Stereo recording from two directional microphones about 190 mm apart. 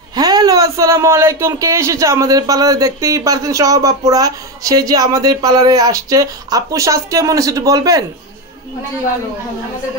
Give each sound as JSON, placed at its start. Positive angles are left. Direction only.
{"t": 0.1, "sound": "a man's voice", "side_deg": -20}